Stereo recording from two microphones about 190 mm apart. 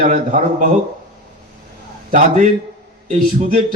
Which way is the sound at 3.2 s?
40° right (ahead or behind).